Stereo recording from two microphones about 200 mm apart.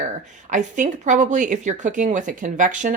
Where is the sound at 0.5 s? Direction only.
40° right (ahead or behind).